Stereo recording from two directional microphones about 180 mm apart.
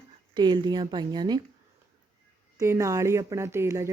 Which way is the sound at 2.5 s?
15° right (ahead or behind).